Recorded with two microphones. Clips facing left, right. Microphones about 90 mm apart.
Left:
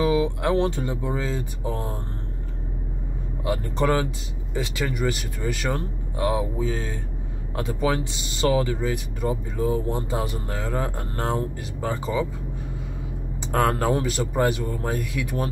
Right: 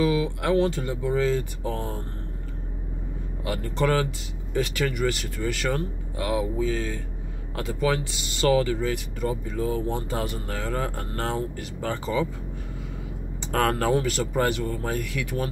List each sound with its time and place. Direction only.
0.0 s speech: 25° left (ahead or behind)
3.4 s speech: 25° left (ahead or behind)
13.5 s speech: 20° left (ahead or behind)